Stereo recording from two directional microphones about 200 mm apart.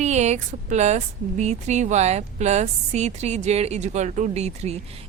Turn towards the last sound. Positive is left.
turn(degrees=-35)  # may be behind; listen again after turning